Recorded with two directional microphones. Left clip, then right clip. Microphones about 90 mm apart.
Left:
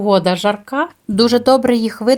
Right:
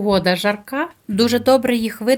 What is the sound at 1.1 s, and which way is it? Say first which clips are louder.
Speech: left 3 dB; 40° left (ahead or behind).